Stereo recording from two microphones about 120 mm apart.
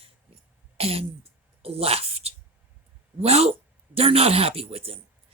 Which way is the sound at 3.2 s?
60° right (ahead or behind).